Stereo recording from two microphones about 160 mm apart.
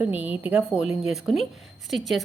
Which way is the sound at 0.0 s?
10° right (ahead or behind).